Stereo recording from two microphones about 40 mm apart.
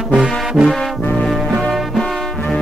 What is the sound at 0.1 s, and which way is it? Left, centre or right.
Music, right.